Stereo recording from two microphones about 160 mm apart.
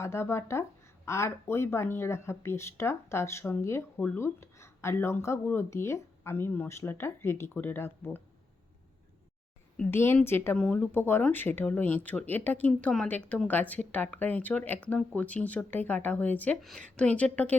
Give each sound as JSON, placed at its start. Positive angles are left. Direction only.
{"t": 0.0, "sound": "speech", "side_deg": 15}
{"t": 9.7, "sound": "speech", "side_deg": 10}